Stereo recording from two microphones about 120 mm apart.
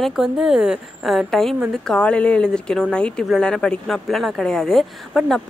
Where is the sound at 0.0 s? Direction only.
5° right (ahead or behind).